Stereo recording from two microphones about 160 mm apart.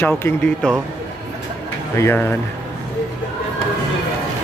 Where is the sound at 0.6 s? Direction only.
5° left (ahead or behind).